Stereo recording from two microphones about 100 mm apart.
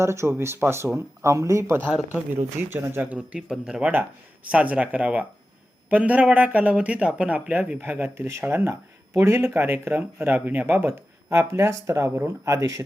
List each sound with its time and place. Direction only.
0.0 s speech: 25° right (ahead or behind)
1.9 s speech: 15° right (ahead or behind); by 12.8 s 30° right (ahead or behind)